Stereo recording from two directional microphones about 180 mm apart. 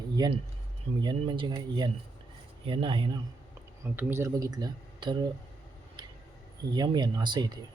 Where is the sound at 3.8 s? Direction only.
15° right (ahead or behind).